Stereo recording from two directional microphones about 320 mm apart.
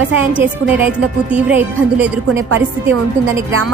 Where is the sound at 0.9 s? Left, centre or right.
Centre.